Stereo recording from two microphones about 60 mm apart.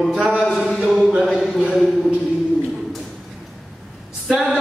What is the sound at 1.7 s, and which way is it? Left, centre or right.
Speech, centre.